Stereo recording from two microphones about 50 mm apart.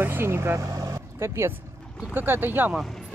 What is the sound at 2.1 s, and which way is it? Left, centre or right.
Speech, right.